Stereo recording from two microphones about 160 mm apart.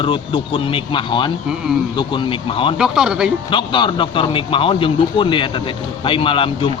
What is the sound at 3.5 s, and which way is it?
A man's voice, 30° left (ahead or behind).